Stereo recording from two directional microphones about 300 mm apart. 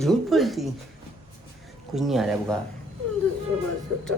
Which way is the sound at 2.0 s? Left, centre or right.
Centre.